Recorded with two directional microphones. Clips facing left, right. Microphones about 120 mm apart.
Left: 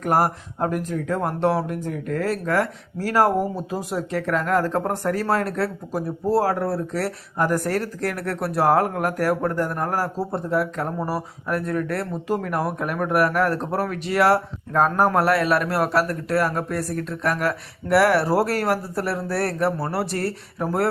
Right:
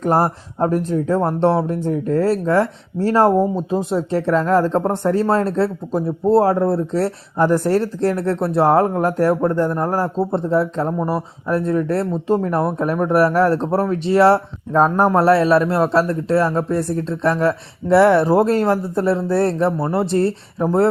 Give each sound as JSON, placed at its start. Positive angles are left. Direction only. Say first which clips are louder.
{"t": 0.0, "sound": "speech", "louder": "right 3 dB", "side_deg": -25}